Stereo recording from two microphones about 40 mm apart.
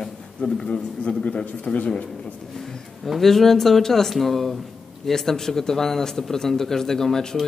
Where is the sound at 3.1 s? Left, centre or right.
Centre.